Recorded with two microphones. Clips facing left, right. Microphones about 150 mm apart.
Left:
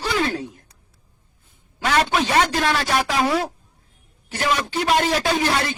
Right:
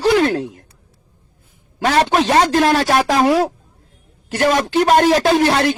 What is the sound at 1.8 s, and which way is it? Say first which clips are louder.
Speech: right 5 dB; 40° right (ahead or behind).